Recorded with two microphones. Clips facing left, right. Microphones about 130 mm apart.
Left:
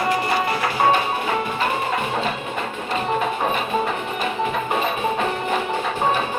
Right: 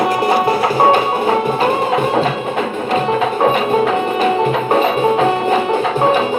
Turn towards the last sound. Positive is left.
turn(degrees=-75)  # may be behind; listen again after turning